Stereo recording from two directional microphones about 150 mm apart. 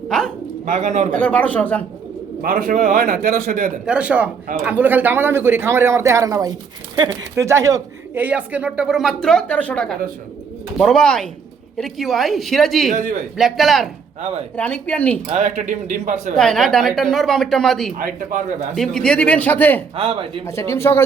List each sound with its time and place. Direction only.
0.6 s speech: 55° right (ahead or behind)
1.1 s speech: 10° left (ahead or behind)
2.4 s a man's voice: 70° right (ahead or behind)
3.8 s a woman's voice: 10° right (ahead or behind)
12.9 s speech: 60° right (ahead or behind)
13.3 s a woman's voice: centre (ahead or behind)
14.2 s speech: 45° right (ahead or behind)
14.5 s speech: 10° left (ahead or behind)
15.3 s speech: 50° right (ahead or behind)
16.3 s a woman's voice: 5° left (ahead or behind)
17.9 s speech: 60° right (ahead or behind)
18.7 s speech: 5° left (ahead or behind)
20.0 s speech: 35° right (ahead or behind)
20.6 s speech: 15° left (ahead or behind)